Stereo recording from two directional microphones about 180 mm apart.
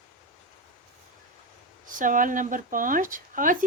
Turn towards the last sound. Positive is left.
turn(degrees=-50)  # may be behind; listen again after turning